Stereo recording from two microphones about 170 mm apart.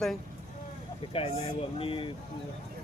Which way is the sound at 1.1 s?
35° left (ahead or behind).